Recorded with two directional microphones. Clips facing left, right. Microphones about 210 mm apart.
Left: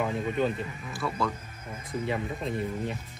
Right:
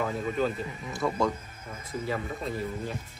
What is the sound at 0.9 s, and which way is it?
Speech, 20° right (ahead or behind).